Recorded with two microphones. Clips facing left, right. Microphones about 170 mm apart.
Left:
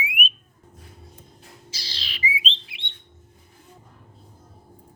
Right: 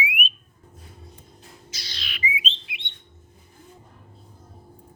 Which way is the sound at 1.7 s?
30° left (ahead or behind).